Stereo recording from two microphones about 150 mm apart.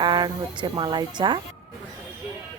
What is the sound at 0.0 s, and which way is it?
Speech, 30° right (ahead or behind).